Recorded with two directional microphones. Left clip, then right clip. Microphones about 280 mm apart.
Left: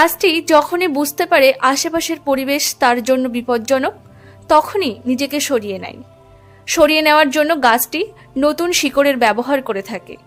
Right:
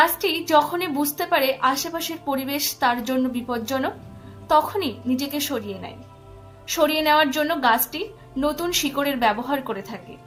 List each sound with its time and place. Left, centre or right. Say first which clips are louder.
0.0 s a woman's voice: left 6 dB; left